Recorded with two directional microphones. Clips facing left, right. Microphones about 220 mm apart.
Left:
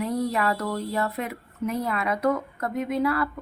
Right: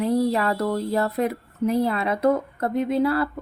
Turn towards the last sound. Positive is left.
turn(degrees=-30)  # may be behind; listen again after turning